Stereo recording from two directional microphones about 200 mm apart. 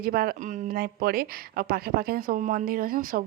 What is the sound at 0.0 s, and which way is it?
A woman's voice, 50° right (ahead or behind).